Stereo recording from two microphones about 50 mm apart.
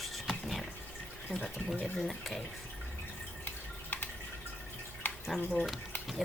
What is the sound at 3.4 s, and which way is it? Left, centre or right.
Drip, left.